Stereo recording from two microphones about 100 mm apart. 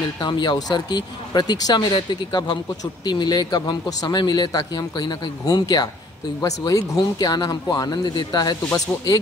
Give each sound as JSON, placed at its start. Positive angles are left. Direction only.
{"t": 0.2, "sound": "speech", "side_deg": 50}